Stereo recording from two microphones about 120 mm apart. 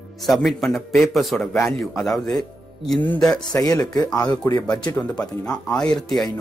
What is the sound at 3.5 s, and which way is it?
Speech, 30° left (ahead or behind).